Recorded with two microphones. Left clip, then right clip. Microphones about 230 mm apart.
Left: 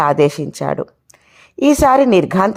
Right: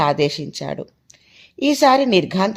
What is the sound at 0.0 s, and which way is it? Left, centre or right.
A woman's voice, left.